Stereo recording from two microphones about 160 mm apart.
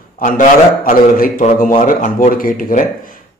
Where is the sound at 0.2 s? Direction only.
55° left (ahead or behind).